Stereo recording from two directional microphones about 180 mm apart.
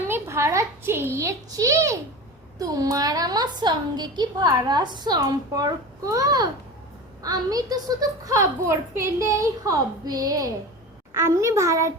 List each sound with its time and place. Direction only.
0.1 s a child's voice: 15° right (ahead or behind)